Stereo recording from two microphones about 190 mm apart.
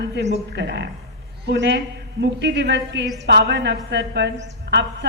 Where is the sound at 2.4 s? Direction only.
65° right (ahead or behind).